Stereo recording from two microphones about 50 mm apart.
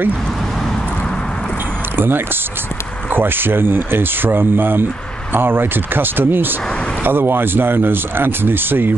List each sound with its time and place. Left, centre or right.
2.0 s speech: right